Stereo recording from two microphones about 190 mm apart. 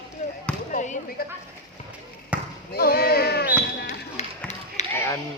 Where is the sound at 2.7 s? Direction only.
55° left (ahead or behind).